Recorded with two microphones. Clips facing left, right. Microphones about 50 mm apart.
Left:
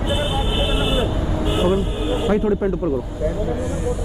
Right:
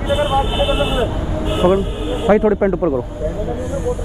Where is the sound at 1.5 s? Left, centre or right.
Right.